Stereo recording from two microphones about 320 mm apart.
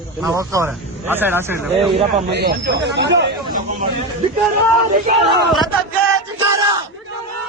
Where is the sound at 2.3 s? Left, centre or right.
Right.